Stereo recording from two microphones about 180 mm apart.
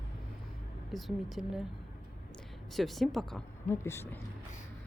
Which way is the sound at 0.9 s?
Centre (ahead or behind).